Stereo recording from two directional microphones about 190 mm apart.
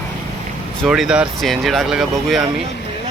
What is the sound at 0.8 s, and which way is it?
Speech, 5° right (ahead or behind).